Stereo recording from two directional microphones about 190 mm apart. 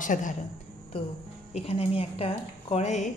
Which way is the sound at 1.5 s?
35° left (ahead or behind).